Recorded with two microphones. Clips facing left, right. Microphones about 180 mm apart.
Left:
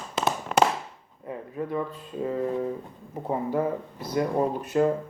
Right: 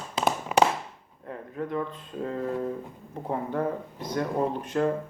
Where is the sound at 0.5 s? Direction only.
5° right (ahead or behind).